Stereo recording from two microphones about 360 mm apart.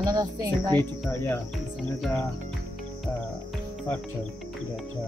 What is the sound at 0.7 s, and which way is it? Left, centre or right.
Speech, centre.